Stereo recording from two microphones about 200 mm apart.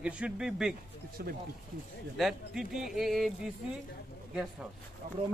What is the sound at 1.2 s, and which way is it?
Speech, 50° right (ahead or behind).